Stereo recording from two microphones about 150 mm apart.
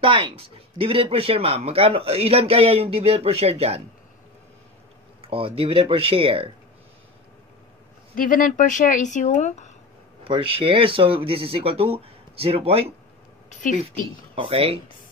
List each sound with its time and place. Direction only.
0.0 s speech: 35° right (ahead or behind)
5.2 s speech: 40° right (ahead or behind)
8.1 s speech: 65° left (ahead or behind)
10.2 s speech: 35° right (ahead or behind)
13.5 s a woman's voice: 60° left (ahead or behind)
14.3 s speech: 35° right (ahead or behind)